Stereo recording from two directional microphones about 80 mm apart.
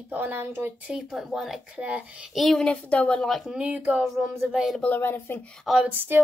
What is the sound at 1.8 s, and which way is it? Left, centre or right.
Speech, centre.